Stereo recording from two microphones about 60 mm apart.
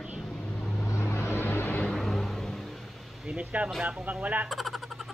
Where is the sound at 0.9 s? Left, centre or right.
Left.